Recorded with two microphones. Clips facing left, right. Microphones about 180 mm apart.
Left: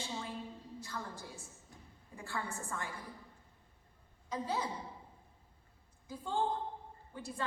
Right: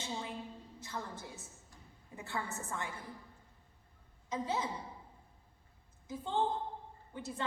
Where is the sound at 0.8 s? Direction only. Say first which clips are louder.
Right 2 dB; 20° right (ahead or behind).